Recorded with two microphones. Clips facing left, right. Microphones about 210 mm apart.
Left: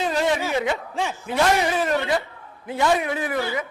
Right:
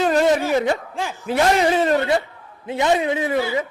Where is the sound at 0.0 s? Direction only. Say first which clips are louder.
Right 5 dB; 50° right (ahead or behind).